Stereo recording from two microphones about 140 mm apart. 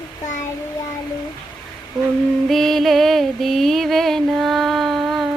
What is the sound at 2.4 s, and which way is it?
Music, centre (ahead or behind).